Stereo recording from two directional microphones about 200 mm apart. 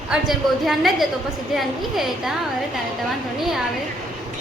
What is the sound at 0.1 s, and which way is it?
A woman's voice, centre (ahead or behind).